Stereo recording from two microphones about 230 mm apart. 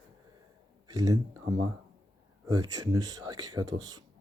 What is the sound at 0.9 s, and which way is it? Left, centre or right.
Speech, centre.